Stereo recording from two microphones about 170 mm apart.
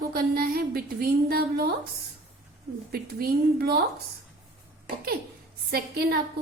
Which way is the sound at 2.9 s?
65° right (ahead or behind).